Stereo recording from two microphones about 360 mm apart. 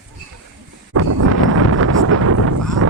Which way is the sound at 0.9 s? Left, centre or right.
Right.